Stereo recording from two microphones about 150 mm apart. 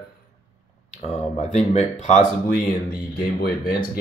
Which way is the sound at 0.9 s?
45° left (ahead or behind).